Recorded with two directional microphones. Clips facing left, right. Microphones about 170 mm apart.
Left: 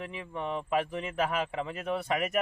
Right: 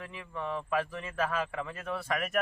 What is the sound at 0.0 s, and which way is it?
A man's voice, 20° left (ahead or behind).